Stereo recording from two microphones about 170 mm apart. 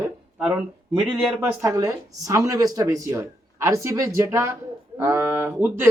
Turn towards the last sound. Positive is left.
turn(degrees=-10)  # may be behind; listen again after turning